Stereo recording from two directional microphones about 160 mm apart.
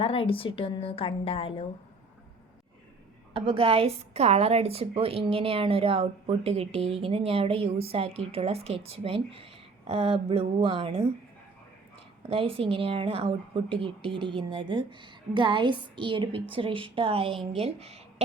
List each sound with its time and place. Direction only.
0.0 s a woman's voice: 35° left (ahead or behind)
3.3 s a woman's voice: 35° right (ahead or behind)
12.3 s a woman's voice: 35° right (ahead or behind)